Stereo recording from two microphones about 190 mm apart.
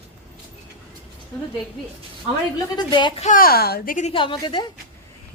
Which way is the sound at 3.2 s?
50° left (ahead or behind).